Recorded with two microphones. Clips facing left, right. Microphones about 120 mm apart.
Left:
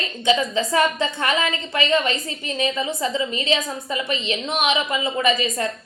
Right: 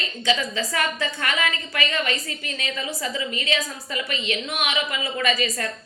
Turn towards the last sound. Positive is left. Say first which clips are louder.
# left 3 dB
turn(degrees=25)  # may be behind; listen again after turning